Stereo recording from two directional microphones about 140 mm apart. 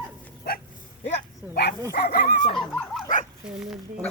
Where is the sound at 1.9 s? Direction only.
90° left.